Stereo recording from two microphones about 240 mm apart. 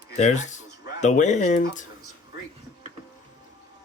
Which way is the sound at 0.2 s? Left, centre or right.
Left.